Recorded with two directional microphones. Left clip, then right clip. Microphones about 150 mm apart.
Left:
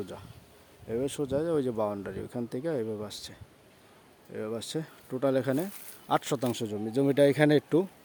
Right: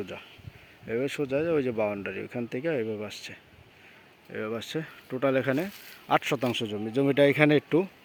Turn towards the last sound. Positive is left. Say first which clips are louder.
# right 2 dB
turn(degrees=0)  # may be behind; listen again after turning